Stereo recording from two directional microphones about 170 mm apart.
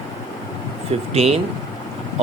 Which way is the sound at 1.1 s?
40° right (ahead or behind).